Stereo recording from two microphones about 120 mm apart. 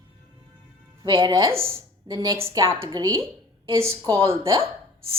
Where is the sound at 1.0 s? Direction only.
40° right (ahead or behind).